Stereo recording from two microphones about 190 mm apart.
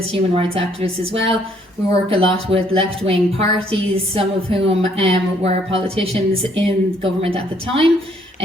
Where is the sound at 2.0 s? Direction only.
30° right (ahead or behind).